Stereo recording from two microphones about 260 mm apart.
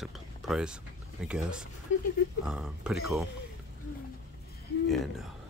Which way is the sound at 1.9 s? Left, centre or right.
Left.